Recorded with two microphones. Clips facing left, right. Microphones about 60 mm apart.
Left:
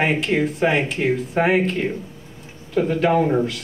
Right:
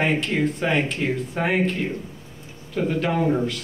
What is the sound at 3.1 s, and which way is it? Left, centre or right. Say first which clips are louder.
Speech: left 3 dB; centre.